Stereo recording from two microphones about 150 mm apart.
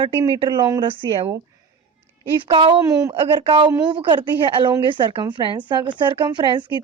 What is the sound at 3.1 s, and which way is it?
Speech, 35° right (ahead or behind).